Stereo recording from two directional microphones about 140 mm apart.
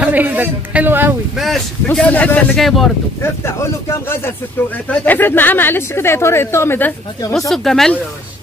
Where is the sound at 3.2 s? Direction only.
20° left (ahead or behind).